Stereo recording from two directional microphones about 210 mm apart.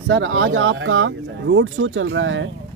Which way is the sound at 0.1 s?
65° right (ahead or behind).